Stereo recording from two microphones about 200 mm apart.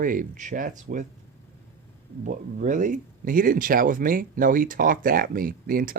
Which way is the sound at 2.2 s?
40° right (ahead or behind).